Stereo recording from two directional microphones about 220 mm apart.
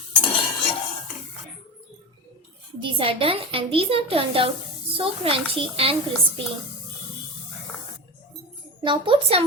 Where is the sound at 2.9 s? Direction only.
25° right (ahead or behind).